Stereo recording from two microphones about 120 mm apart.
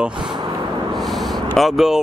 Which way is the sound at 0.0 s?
5° right (ahead or behind).